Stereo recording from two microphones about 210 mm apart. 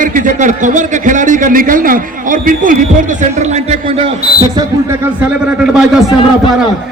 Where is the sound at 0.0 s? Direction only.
40° right (ahead or behind).